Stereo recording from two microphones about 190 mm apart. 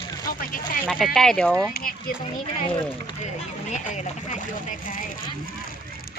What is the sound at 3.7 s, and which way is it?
Speech, 40° left (ahead or behind).